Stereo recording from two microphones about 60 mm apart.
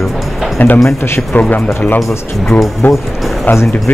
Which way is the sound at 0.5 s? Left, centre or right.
Left.